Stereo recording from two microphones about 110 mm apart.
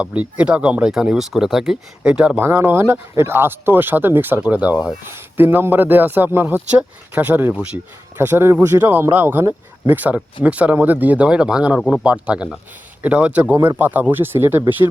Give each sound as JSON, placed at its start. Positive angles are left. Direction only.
{"t": 0.0, "sound": "a man's voice", "side_deg": -10}
{"t": 2.4, "sound": "speech", "side_deg": -20}
{"t": 5.0, "sound": "a man's voice", "side_deg": -20}
{"t": 8.2, "sound": "a man's voice", "side_deg": -20}